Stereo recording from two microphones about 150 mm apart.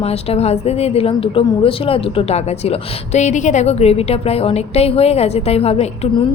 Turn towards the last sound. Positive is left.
turn(degrees=45)  # may be behind; listen again after turning